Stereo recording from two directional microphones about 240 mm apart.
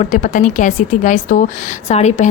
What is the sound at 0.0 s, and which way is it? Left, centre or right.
A woman's voice, left.